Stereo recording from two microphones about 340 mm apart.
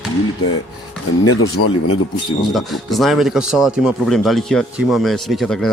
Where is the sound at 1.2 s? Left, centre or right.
Left.